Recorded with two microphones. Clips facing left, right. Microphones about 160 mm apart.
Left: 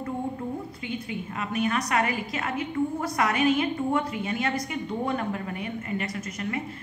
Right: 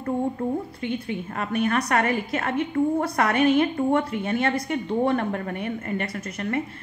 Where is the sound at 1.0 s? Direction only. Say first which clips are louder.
Right 3 dB; 55° right (ahead or behind).